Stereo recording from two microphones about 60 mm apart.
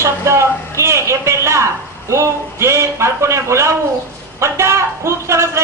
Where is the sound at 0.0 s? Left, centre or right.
Right.